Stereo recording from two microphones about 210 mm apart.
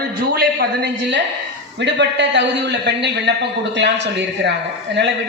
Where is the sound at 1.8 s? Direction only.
55° right (ahead or behind).